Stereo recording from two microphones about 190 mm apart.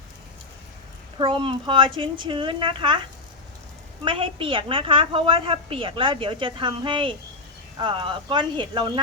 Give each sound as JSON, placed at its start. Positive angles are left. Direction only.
{"t": 1.2, "sound": "a woman's voice", "side_deg": -25}